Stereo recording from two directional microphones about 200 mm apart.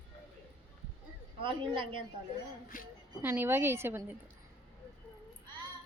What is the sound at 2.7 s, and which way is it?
Speech, 45° left (ahead or behind).